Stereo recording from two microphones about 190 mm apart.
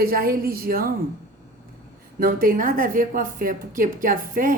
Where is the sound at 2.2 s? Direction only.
50° right (ahead or behind).